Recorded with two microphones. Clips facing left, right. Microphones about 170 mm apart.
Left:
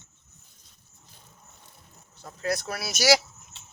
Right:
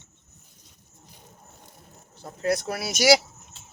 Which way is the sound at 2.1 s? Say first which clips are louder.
Right 4 dB; 25° right (ahead or behind).